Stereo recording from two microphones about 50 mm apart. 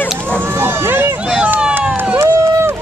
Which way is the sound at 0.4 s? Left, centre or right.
Right.